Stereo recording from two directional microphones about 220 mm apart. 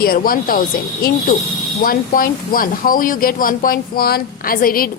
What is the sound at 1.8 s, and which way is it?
Speech, 40° left (ahead or behind).